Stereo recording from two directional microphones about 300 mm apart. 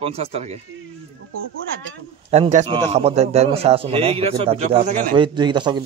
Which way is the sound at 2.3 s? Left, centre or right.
Right.